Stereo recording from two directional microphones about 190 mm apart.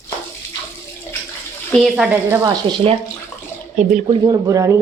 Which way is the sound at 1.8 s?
5° right (ahead or behind).